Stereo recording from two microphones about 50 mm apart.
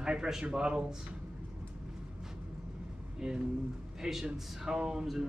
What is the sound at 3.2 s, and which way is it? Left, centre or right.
Speech, centre.